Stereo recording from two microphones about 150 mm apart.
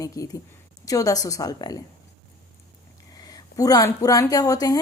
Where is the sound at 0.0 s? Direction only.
20° left (ahead or behind).